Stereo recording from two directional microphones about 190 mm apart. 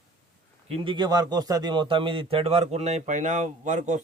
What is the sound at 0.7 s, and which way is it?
A man's voice, 25° right (ahead or behind).